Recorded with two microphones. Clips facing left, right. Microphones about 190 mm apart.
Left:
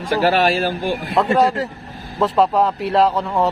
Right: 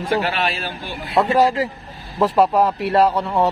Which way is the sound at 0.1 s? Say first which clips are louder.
Left 6 dB; 40° left (ahead or behind).